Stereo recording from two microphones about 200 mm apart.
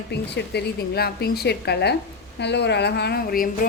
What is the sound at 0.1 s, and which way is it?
A woman's voice, 55° left (ahead or behind).